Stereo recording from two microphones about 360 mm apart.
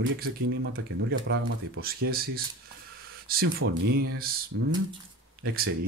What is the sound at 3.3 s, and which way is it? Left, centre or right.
Speech, right.